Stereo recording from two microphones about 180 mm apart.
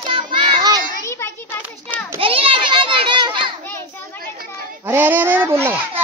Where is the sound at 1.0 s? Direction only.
15° left (ahead or behind).